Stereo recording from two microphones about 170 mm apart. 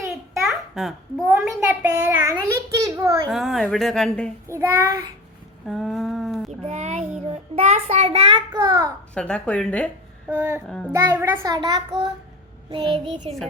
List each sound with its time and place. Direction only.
0.4 s a child's voice: centre (ahead or behind); by 3.2 s 20° right (ahead or behind)
3.2 s a woman's voice: centre (ahead or behind)
4.4 s child singing: 15° right (ahead or behind)
5.6 s a woman's voice: centre (ahead or behind)
6.5 s a child's voice: 40° right (ahead or behind); by 8.9 s 20° right (ahead or behind)
9.1 s speech: 5° left (ahead or behind)
10.2 s child singing: 15° right (ahead or behind)
11.1 s a child's voice: 15° right (ahead or behind); by 13.1 s 30° right (ahead or behind)